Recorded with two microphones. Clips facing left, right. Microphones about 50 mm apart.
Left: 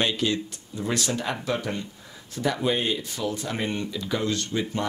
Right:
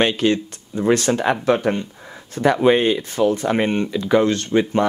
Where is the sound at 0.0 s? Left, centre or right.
Right.